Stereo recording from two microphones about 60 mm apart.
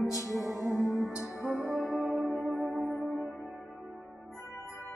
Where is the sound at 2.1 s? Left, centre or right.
Centre.